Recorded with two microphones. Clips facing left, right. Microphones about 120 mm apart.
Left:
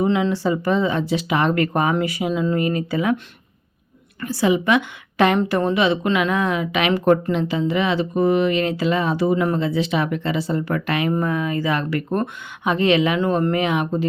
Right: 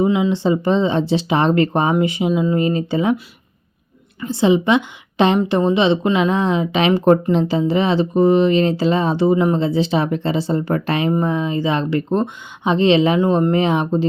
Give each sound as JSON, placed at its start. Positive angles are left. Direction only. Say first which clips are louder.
{"t": 0.0, "sound": "speech", "louder": "right 3 dB", "side_deg": -15}
{"t": 4.2, "sound": "a woman's voice", "louder": "right 4 dB", "side_deg": -25}